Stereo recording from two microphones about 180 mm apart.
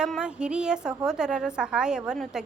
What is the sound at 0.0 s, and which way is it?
A woman's voice, 5° right (ahead or behind).